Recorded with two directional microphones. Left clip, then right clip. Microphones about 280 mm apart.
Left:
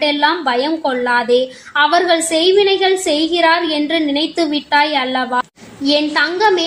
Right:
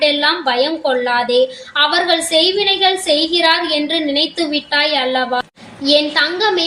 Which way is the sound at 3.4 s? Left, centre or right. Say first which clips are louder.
Even; left.